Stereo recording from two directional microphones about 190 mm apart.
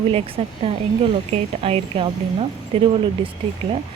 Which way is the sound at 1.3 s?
30° right (ahead or behind).